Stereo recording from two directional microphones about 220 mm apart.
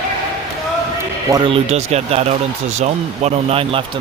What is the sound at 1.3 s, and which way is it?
Speech, 25° right (ahead or behind).